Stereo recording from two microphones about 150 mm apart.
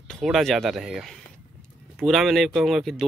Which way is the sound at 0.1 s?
Centre (ahead or behind).